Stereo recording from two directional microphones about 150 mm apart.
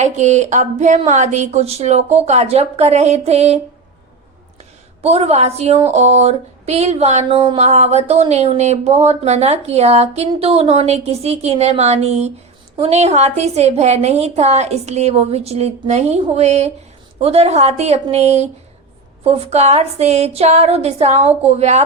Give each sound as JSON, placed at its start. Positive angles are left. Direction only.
{"t": 0.0, "sound": "speech", "side_deg": -50}
{"t": 5.0, "sound": "speech", "side_deg": -45}
{"t": 7.3, "sound": "a sound", "side_deg": -25}
{"t": 7.5, "sound": "speech", "side_deg": -50}